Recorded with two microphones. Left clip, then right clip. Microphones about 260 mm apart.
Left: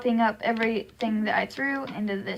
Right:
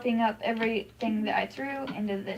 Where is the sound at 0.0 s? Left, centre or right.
Left.